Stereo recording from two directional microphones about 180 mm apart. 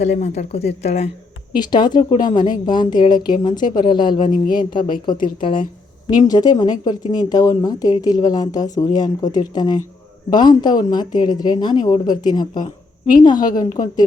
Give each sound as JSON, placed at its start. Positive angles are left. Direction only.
{"t": 0.0, "sound": "speech", "side_deg": 40}
{"t": 1.5, "sound": "speech", "side_deg": 25}